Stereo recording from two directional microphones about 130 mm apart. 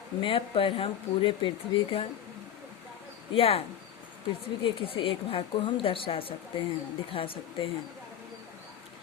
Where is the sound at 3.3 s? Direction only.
50° left (ahead or behind).